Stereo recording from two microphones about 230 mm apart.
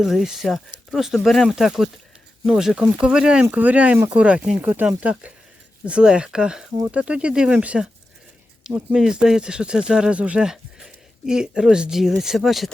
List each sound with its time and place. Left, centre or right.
0.0 s speech: centre